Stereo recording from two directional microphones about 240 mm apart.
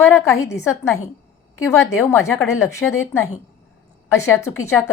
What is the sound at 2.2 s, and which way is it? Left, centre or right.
Speech, centre.